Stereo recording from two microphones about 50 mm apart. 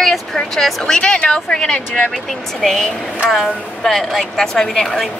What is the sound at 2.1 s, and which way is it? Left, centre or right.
A woman's voice, centre.